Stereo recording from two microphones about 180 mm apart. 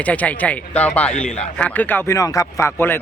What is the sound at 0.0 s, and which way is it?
Speech, 10° left (ahead or behind).